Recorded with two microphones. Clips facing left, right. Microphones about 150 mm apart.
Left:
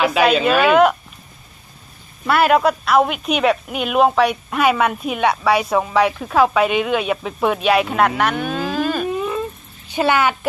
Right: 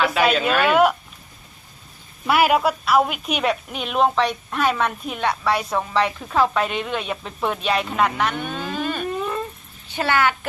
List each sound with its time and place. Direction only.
0.0 s a woman's voice: 5° left (ahead or behind)
2.2 s a woman's voice: 10° right (ahead or behind); by 6.8 s 10° left (ahead or behind)
7.4 s speech: 90° left
9.0 s whimper: 5° left (ahead or behind)
9.9 s speech: 15° left (ahead or behind)